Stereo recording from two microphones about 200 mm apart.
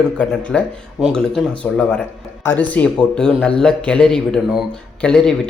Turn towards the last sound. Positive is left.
turn(degrees=5)  # may be behind; listen again after turning